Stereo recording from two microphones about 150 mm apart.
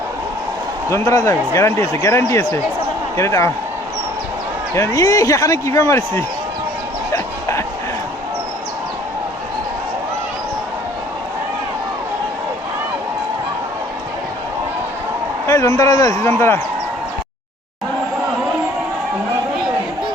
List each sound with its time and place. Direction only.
0.9 s speech: 20° left (ahead or behind)
4.7 s speech: 20° left (ahead or behind)
7.1 s a sound: 20° left (ahead or behind)
15.4 s a man's voice: 25° left (ahead or behind)